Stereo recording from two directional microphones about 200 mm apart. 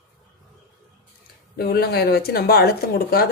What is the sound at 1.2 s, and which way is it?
Speech, 50° left (ahead or behind).